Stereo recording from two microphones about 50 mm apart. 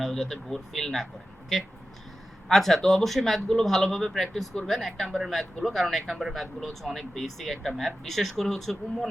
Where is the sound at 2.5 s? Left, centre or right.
Centre.